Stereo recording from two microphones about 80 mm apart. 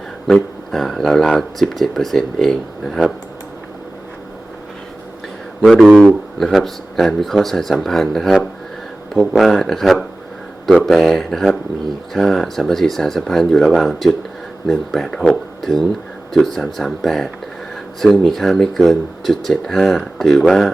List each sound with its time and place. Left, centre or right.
0.3 s speech: centre
5.6 s speech: centre